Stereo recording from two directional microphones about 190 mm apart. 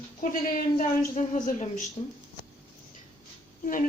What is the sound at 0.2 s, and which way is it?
A woman's voice, 45° left (ahead or behind).